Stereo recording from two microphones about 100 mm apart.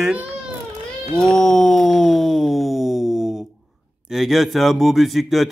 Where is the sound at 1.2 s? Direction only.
5° left (ahead or behind).